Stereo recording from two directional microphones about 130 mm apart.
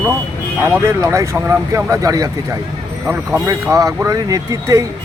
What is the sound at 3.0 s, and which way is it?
Speech, 15° right (ahead or behind).